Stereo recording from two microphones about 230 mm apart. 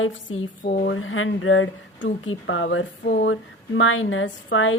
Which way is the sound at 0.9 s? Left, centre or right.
Left.